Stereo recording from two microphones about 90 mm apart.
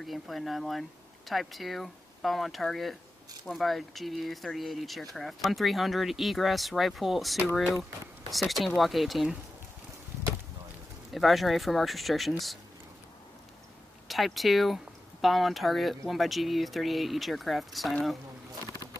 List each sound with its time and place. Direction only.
0.0 s speech: centre (ahead or behind)
11.1 s speech: centre (ahead or behind)
14.0 s speech: centre (ahead or behind)